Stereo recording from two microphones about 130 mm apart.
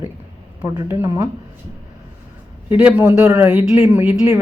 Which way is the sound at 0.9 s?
15° right (ahead or behind).